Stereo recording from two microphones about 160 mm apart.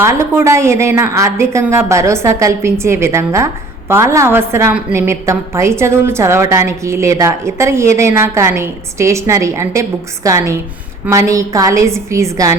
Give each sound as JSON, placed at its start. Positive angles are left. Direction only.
{"t": 0.0, "sound": "a woman's voice", "side_deg": -15}